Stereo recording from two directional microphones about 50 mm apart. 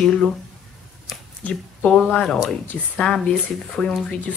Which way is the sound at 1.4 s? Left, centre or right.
Left.